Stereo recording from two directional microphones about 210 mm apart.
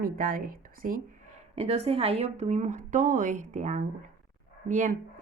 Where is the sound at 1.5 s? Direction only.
30° right (ahead or behind).